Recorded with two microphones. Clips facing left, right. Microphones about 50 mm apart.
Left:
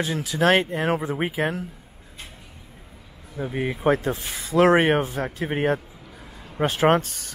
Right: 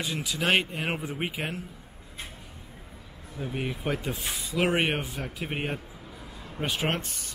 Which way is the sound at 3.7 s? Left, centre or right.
Left.